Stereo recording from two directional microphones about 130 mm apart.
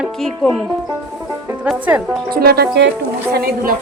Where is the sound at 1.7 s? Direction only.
10° right (ahead or behind).